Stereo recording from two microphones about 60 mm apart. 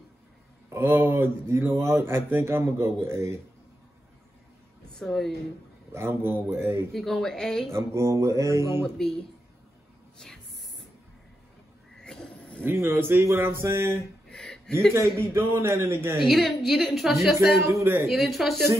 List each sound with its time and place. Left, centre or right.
0.7 s speech: right
4.9 s speech: centre
5.9 s speech: right
6.9 s a woman's voice: centre
7.7 s speech: right
8.8 s a woman's voice: centre
10.1 s hiss: centre
12.0 s a sound: centre
12.6 s speech: right
13.2 s mantra: right
13.5 s speech: right
14.3 s a sound: centre
15.0 s speech: right
16.2 s a woman's voice: centre